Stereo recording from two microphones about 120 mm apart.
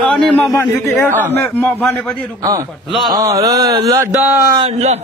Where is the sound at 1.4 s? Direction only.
15° left (ahead or behind).